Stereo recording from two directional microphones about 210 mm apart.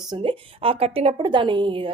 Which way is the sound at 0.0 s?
20° right (ahead or behind).